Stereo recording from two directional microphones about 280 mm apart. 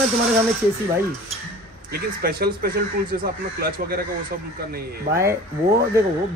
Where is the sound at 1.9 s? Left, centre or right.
Right.